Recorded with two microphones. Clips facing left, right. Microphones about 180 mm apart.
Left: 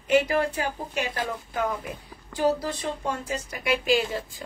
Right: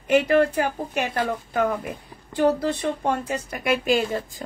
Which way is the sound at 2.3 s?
60° right (ahead or behind).